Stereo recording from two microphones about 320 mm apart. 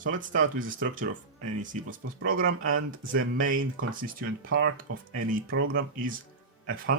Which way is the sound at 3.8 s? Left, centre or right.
Right.